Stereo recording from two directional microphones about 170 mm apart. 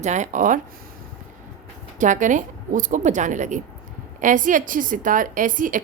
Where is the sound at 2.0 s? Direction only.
45° right (ahead or behind).